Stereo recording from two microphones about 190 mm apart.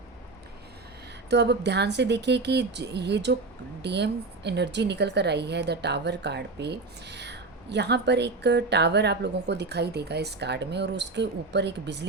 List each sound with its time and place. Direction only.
1.3 s a woman's voice: 65° right (ahead or behind)